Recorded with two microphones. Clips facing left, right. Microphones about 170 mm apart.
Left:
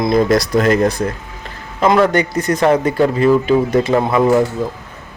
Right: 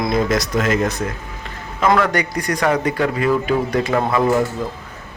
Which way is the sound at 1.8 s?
25° left (ahead or behind).